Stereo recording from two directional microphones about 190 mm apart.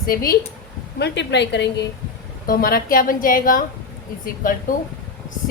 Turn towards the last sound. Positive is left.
turn(degrees=45)  # may be behind; listen again after turning